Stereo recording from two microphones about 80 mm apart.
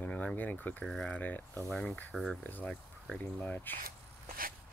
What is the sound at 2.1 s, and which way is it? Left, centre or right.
Speech, centre.